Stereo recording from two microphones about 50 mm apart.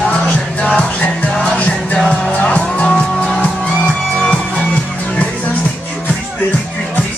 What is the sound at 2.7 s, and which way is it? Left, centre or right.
Vehicle, centre.